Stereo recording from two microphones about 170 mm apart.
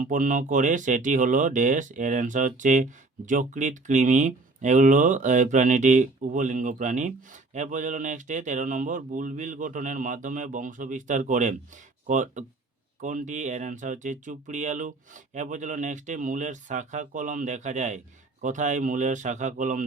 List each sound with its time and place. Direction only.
0.1 s speech: 50° right (ahead or behind)